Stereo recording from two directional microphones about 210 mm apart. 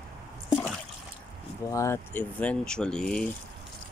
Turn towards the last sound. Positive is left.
turn(degrees=5)  # may be behind; listen again after turning